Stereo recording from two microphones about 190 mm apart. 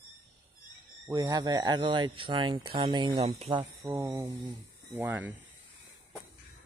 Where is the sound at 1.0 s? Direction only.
15° right (ahead or behind); by 3.6 s 30° right (ahead or behind).